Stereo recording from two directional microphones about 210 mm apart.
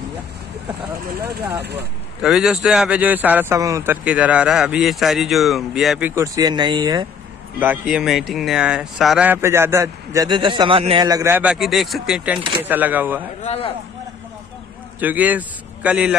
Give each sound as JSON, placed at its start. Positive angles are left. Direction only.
{"t": 2.2, "sound": "speech", "side_deg": -5}
{"t": 7.5, "sound": "speech", "side_deg": -10}
{"t": 13.4, "sound": "speech", "side_deg": 30}
{"t": 15.0, "sound": "a man's voice", "side_deg": -10}